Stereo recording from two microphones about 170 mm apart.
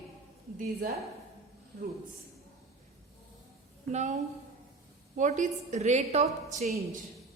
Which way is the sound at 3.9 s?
45° right (ahead or behind).